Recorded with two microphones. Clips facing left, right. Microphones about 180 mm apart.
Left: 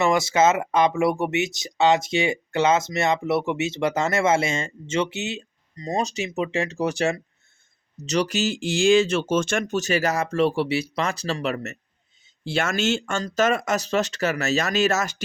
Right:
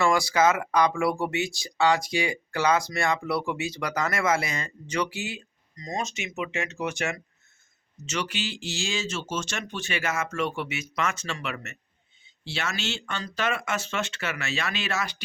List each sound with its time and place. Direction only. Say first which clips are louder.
0.0 s speech: left 3 dB; 20° left (ahead or behind); by 11.8 s 40° left (ahead or behind)
12.2 s speech: left 8 dB; 50° left (ahead or behind)